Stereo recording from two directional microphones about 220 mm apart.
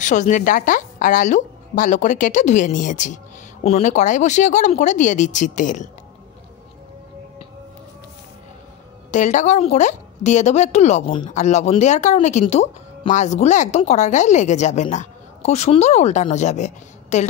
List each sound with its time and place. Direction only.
0.0 s a woman's voice: 35° left (ahead or behind)
9.1 s a woman's voice: 35° left (ahead or behind)